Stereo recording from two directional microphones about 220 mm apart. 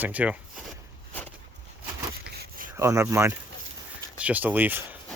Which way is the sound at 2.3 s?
45° right (ahead or behind).